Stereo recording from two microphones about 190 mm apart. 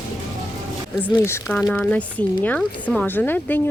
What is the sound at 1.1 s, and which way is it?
Speech, 15° left (ahead or behind).